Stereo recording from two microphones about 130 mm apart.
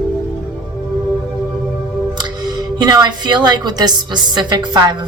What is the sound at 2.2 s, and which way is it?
Speech, 30° right (ahead or behind).